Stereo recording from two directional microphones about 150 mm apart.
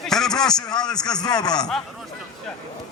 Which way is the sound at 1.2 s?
25° left (ahead or behind).